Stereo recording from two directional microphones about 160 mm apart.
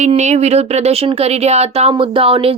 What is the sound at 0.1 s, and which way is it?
Speech, 45° right (ahead or behind).